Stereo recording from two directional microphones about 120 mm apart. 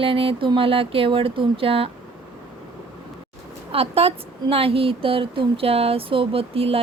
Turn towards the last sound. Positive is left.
turn(degrees=-55)  # may be behind; listen again after turning